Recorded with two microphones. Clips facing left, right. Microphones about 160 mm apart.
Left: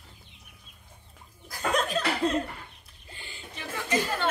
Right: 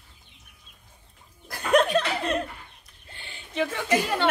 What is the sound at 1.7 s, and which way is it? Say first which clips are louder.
Laughter: right 6 dB; 65° right (ahead or behind).